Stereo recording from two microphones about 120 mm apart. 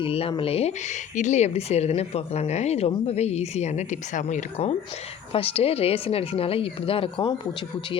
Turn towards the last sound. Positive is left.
turn(degrees=50)  # may be behind; listen again after turning